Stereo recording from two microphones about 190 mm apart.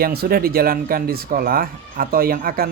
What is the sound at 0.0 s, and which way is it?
Speech, 55° right (ahead or behind).